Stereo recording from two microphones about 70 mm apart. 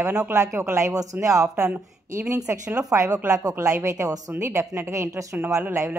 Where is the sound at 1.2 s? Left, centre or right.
Right.